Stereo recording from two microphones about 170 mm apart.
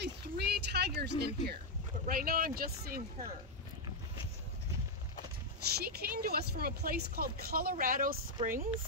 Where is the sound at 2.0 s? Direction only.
60° right (ahead or behind).